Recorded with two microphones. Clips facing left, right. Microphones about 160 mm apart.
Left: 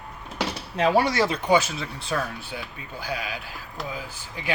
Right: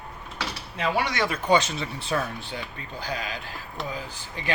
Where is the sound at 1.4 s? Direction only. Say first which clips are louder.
Left 1 dB; 5° left (ahead or behind).